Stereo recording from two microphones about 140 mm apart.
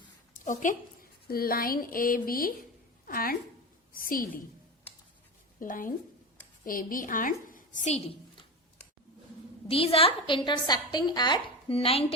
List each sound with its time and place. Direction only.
0.3 s a woman's voice: 65° left (ahead or behind)
1.3 s a woman's voice: 90° left
5.5 s a woman's voice: 75° left (ahead or behind); by 8.4 s 45° left (ahead or behind)
9.6 s a woman's voice: 45° left (ahead or behind)